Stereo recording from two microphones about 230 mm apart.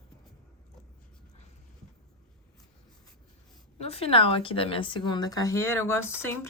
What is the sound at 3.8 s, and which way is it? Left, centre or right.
Speech, left.